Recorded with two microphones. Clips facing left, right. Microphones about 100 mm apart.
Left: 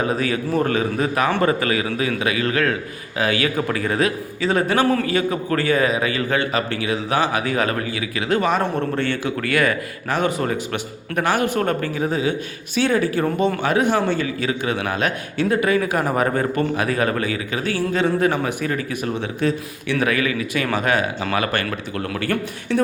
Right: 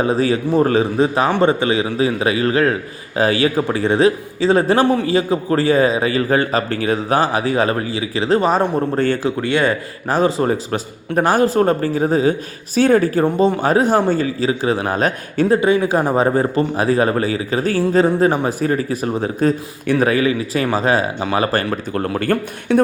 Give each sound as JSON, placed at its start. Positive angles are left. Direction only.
{"t": 0.0, "sound": "a man's voice", "side_deg": -30}
{"t": 9.4, "sound": "a man's voice", "side_deg": -25}
{"t": 13.2, "sound": "a man's voice", "side_deg": -25}
{"t": 13.6, "sound": "a man's voice", "side_deg": -35}
{"t": 22.2, "sound": "a man's voice", "side_deg": -45}